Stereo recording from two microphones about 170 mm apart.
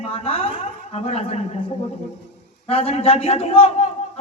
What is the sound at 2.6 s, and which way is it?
A woman's voice, 35° left (ahead or behind).